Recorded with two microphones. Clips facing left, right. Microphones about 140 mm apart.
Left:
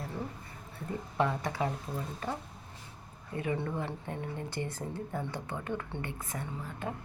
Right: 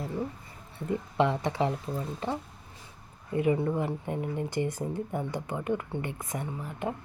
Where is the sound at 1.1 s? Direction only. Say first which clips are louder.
Right 4 dB; 20° right (ahead or behind).